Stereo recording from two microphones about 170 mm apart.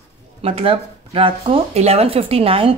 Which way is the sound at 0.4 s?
35° right (ahead or behind).